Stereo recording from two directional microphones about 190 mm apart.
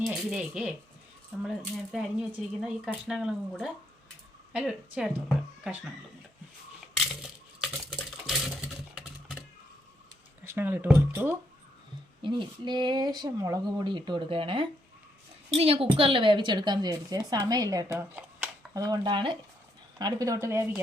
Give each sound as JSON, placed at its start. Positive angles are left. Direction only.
{"t": 0.0, "sound": "speech", "side_deg": 0}
{"t": 6.9, "sound": "coin", "side_deg": 0}
{"t": 10.4, "sound": "speech", "side_deg": -10}
{"t": 12.2, "sound": "a woman's voice", "side_deg": -25}